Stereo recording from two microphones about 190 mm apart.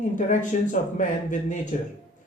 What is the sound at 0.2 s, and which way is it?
Speech, 40° left (ahead or behind).